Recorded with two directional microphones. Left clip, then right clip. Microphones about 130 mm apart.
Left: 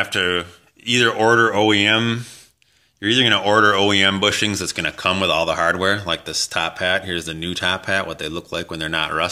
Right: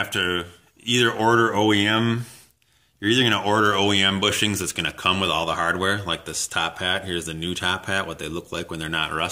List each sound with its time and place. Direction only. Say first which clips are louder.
0.0 s speech: left 4 dB; 25° left (ahead or behind)